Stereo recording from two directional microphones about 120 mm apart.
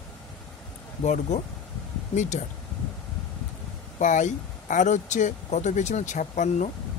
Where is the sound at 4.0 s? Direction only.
90° left.